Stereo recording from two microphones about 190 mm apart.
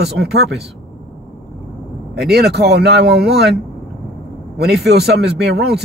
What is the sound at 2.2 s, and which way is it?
Speech, 60° right (ahead or behind).